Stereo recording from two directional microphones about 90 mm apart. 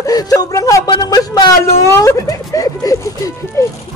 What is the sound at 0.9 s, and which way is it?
Speech, 50° left (ahead or behind).